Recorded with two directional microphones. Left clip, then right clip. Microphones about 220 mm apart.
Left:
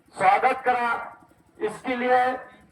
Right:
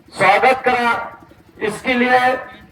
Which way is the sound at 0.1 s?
45° left (ahead or behind).